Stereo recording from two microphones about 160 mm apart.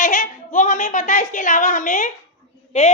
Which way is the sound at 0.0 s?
60° left (ahead or behind).